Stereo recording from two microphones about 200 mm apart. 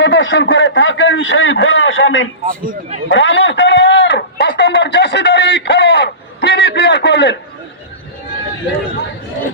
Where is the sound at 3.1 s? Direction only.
70° left (ahead or behind).